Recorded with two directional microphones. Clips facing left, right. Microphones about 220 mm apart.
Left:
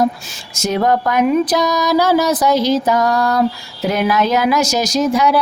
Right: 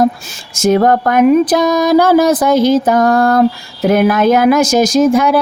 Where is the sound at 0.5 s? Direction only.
50° right (ahead or behind).